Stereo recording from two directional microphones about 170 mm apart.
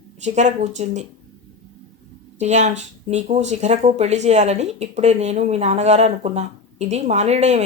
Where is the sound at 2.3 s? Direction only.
40° right (ahead or behind).